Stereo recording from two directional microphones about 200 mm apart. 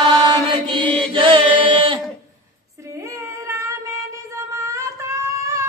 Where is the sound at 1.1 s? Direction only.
25° right (ahead or behind).